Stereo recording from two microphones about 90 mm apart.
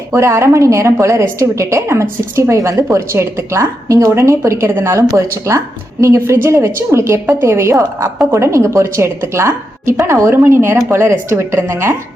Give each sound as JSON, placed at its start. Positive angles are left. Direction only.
{"t": 0.1, "sound": "a woman's voice", "side_deg": -30}